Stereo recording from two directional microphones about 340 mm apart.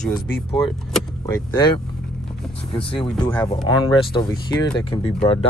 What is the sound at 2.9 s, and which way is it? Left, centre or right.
Speech, centre.